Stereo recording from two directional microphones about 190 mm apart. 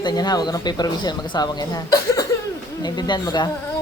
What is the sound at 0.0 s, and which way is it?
Speech, 20° left (ahead or behind).